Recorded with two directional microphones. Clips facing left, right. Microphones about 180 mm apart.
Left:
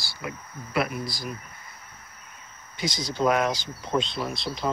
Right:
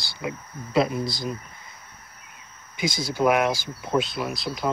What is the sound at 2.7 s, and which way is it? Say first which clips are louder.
Speech: right 3 dB; 10° right (ahead or behind).